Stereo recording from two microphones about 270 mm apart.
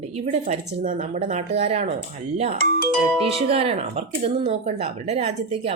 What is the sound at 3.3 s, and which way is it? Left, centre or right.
Speech, right.